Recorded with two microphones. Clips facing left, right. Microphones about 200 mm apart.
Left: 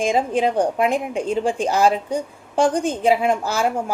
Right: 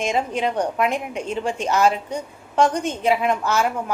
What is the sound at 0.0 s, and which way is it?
A woman's voice, 30° left (ahead or behind).